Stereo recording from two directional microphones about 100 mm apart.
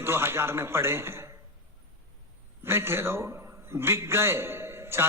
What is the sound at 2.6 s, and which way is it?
A man's voice, 25° right (ahead or behind).